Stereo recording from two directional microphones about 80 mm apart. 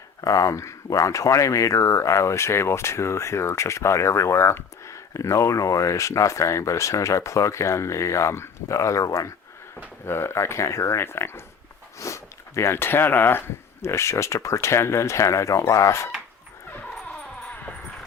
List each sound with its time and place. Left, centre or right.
0.2 s speech: left
10.1 s speech: left
13.8 s speech: left
17.1 s music: centre